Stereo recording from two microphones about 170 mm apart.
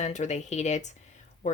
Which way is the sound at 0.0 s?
45° left (ahead or behind).